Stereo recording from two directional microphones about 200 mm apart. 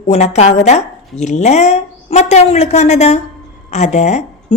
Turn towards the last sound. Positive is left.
turn(degrees=35)  # may be behind; listen again after turning